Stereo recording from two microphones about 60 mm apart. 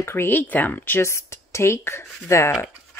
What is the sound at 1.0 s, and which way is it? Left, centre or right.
Speech, left.